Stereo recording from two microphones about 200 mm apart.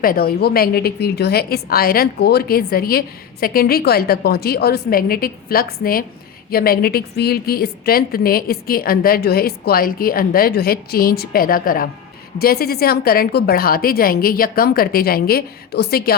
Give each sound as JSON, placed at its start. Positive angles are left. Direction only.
{"t": 0.0, "sound": "a woman's voice", "side_deg": 45}